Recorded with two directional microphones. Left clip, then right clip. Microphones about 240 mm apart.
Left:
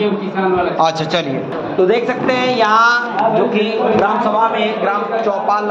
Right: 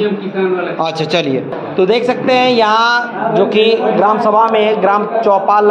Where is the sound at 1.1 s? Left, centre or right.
Right.